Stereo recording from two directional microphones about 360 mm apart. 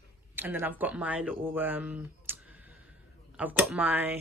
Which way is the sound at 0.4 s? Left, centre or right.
Centre.